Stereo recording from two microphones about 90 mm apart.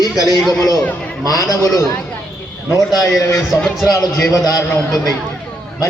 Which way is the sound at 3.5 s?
5° right (ahead or behind).